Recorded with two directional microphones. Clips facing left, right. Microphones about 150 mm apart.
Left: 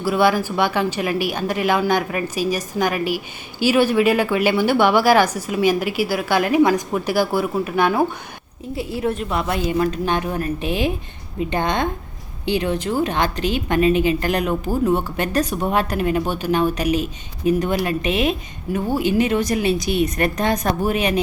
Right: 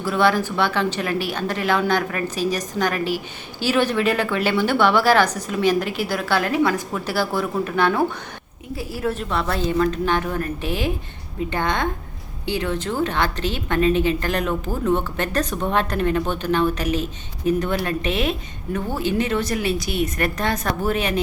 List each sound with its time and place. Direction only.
0.0 s a woman's voice: 10° left (ahead or behind)
8.7 s a woman's voice: 25° left (ahead or behind)
9.3 s a woman's voice: 15° left (ahead or behind)